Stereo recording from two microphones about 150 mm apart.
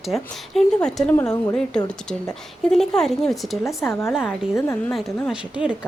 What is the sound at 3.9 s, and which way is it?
Speech, 15° left (ahead or behind).